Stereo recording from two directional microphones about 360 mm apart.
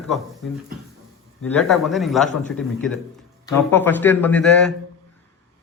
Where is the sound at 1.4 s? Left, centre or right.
Centre.